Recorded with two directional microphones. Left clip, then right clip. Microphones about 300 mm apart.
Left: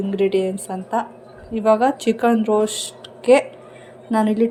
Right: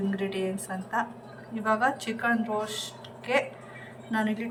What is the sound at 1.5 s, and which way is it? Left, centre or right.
A woman's voice, centre.